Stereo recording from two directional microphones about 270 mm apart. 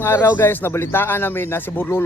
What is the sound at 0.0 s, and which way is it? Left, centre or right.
A man's voice, centre.